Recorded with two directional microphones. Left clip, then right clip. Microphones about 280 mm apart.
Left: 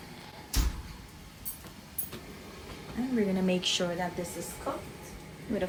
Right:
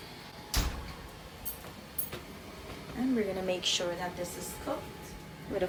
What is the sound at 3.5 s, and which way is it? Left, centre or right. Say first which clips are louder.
Speech: even; left.